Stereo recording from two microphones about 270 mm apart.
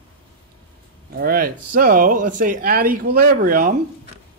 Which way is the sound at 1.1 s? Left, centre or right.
Right.